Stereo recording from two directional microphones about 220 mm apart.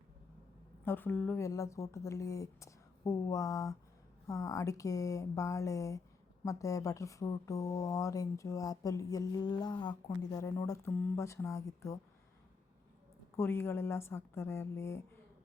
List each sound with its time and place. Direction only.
0.9 s speech: 10° left (ahead or behind)
13.3 s speech: 10° left (ahead or behind)